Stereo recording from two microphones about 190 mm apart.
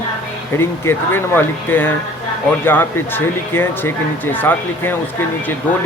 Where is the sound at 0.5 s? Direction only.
10° left (ahead or behind).